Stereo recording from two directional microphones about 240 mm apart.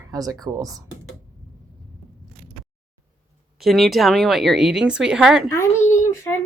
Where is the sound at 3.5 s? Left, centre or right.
Centre.